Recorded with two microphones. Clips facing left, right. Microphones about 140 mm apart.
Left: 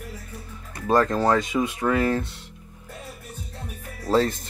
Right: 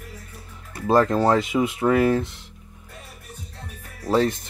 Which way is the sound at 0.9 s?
20° right (ahead or behind).